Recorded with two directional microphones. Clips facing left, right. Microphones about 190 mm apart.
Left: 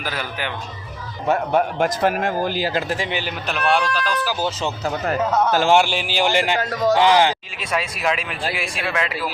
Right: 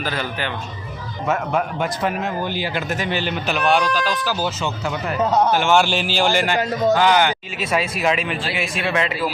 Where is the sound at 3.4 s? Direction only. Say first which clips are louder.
Right 1 dB; centre (ahead or behind).